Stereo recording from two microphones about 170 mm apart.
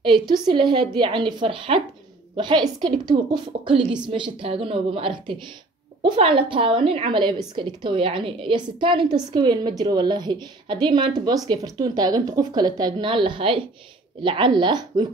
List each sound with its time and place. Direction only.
0.0 s a woman's voice: 30° right (ahead or behind)